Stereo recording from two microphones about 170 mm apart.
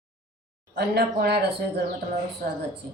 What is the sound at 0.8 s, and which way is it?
A woman's voice, 70° right (ahead or behind).